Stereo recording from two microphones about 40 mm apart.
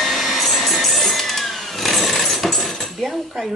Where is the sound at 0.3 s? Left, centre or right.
Centre.